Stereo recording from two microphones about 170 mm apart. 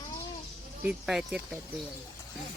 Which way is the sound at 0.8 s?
5° right (ahead or behind).